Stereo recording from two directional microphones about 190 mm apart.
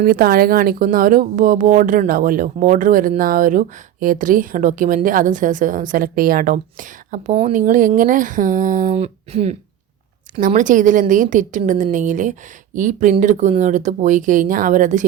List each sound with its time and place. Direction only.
0.0 s a woman's voice: 50° right (ahead or behind)